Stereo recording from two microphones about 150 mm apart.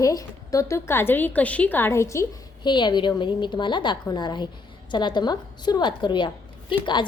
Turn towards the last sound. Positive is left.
turn(degrees=30)  # may be behind; listen again after turning